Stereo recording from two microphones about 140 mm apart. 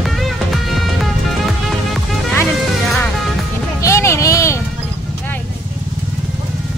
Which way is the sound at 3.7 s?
20° left (ahead or behind).